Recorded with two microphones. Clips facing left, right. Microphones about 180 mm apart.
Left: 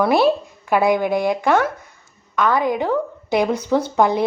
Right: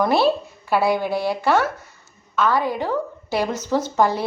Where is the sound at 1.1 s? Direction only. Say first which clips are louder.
Left 4 dB; 15° left (ahead or behind).